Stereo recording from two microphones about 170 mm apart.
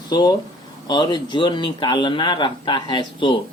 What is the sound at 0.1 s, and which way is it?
Speech, 25° left (ahead or behind).